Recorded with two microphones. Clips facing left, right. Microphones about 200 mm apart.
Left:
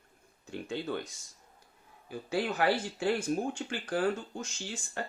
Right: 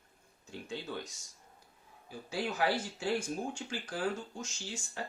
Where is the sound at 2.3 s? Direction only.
60° left (ahead or behind).